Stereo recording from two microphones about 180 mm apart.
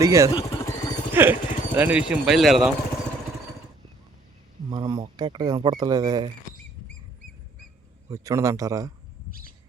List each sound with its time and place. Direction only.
0.0 s speech: 15° right (ahead or behind)
0.3 s vehicle: 25° left (ahead or behind)
1.1 s speech: 10° right (ahead or behind)
4.7 s speech: 25° right (ahead or behind)
8.1 s speech: 20° right (ahead or behind)